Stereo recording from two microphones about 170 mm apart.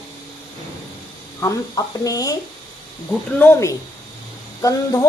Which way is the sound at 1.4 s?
20° left (ahead or behind).